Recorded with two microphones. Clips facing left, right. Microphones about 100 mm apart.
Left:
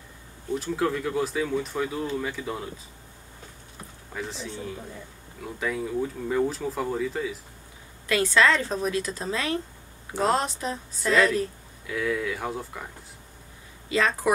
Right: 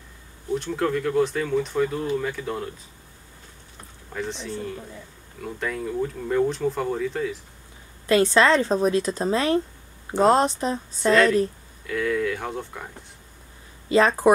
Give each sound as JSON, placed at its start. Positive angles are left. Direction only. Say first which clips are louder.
{"t": 0.6, "sound": "speech", "louder": "right 2 dB", "side_deg": 5}
{"t": 4.1, "sound": "speech", "louder": "right 4 dB", "side_deg": 0}
{"t": 8.1, "sound": "a woman's voice", "louder": "right 4 dB", "side_deg": -30}
{"t": 11.1, "sound": "speech", "louder": "right 4 dB", "side_deg": 0}
{"t": 13.8, "sound": "speech", "louder": "right 6 dB", "side_deg": -35}